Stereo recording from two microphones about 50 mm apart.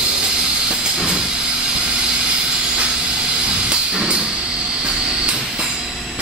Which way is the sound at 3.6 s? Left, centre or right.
Centre.